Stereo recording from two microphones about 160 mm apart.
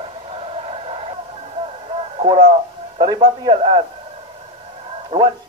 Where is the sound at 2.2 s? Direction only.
40° right (ahead or behind).